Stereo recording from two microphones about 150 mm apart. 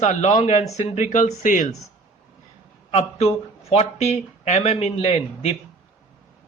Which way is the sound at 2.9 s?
45° left (ahead or behind).